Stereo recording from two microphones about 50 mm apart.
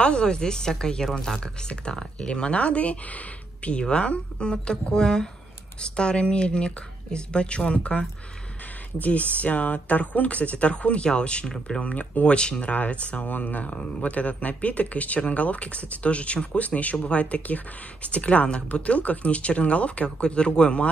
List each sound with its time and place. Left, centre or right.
0.0 s speech: centre
11.8 s speech: left